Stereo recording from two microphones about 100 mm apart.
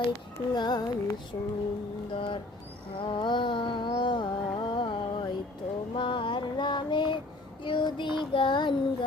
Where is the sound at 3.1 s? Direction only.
50° left (ahead or behind).